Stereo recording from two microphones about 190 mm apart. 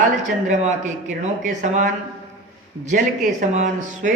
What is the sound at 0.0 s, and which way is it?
Speech, 40° right (ahead or behind).